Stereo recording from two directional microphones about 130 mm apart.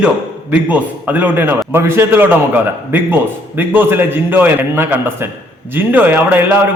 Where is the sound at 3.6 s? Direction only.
15° right (ahead or behind).